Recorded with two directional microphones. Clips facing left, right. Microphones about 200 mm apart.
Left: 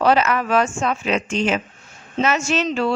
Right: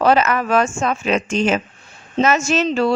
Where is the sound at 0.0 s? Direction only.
45° right (ahead or behind).